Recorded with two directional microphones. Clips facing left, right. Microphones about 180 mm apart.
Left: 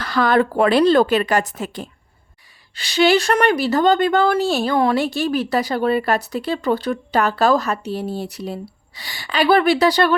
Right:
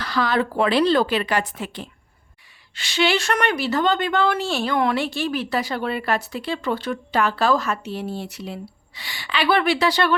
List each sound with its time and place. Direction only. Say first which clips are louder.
0.0 s a woman's voice: left 5 dB; 50° left (ahead or behind)